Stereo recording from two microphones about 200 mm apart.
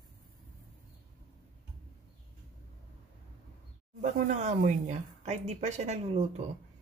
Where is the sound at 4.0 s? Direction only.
35° right (ahead or behind).